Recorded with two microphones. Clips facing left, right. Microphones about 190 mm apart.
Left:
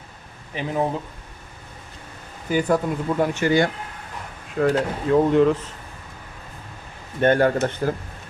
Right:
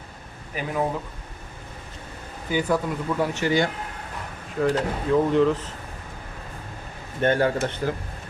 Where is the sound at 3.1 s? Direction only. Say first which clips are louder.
Left 3 dB; 45° left (ahead or behind).